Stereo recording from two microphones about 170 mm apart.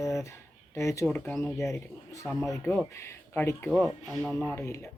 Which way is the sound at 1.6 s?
15° left (ahead or behind).